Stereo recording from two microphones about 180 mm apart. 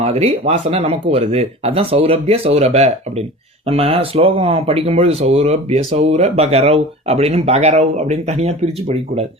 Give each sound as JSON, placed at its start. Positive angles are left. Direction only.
{"t": 0.0, "sound": "speech", "side_deg": -35}